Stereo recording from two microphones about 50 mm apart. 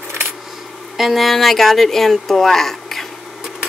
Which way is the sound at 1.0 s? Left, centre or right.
Centre.